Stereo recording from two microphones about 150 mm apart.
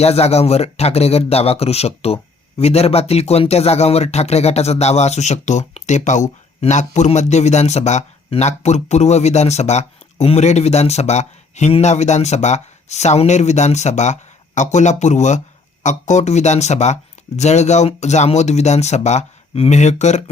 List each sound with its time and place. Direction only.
0.0 s speech: 45° left (ahead or behind)